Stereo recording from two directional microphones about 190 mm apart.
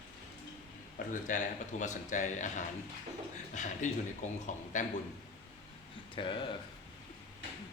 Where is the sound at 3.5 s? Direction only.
40° left (ahead or behind).